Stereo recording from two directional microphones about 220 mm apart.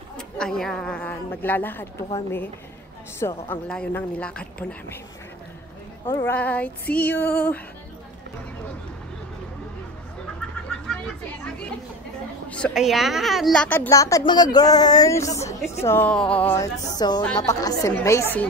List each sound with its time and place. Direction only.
0.4 s a woman's voice: centre (ahead or behind)
3.2 s a woman's voice: 10° left (ahead or behind)
6.0 s a woman's voice: 10° left (ahead or behind)
12.4 s a woman's voice: 5° left (ahead or behind)